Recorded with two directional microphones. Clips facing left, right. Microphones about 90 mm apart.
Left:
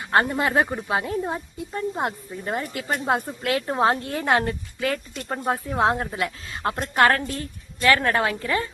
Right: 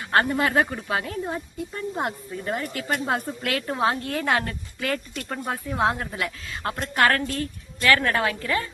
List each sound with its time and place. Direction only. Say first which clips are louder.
0.1 s a woman's voice: left 1 dB; 20° left (ahead or behind)